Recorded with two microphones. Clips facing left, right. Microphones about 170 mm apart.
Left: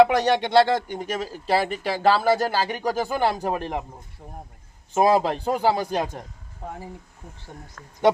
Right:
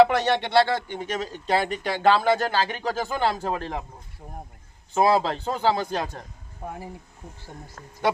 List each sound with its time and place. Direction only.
0.0 s speech: 15° left (ahead or behind)
5.0 s speech: 15° left (ahead or behind)